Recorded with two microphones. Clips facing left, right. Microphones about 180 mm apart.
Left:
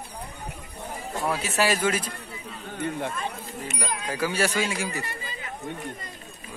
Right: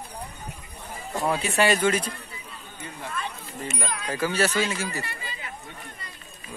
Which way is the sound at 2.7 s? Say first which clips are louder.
Left 10 dB; 60° left (ahead or behind).